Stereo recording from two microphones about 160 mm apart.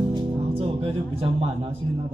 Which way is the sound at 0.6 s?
35° right (ahead or behind).